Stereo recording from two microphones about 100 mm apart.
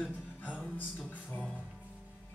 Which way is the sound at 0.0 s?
15° left (ahead or behind).